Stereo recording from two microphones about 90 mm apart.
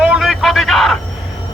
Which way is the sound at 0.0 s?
5° right (ahead or behind).